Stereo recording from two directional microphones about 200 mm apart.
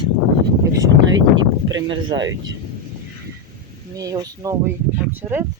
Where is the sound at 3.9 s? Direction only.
15° right (ahead or behind).